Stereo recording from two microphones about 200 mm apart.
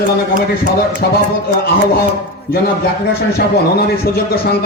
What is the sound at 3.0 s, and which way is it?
A man's voice, 50° left (ahead or behind).